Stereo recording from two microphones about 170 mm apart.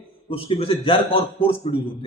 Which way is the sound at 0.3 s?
35° left (ahead or behind).